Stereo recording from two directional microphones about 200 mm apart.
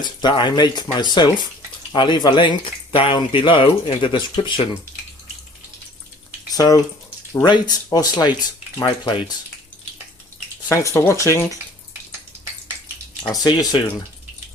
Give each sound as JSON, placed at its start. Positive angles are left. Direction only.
{"t": 0.0, "sound": "speech", "side_deg": 20}
{"t": 6.5, "sound": "speech", "side_deg": 20}
{"t": 10.8, "sound": "speech", "side_deg": 15}
{"t": 13.3, "sound": "speech", "side_deg": 20}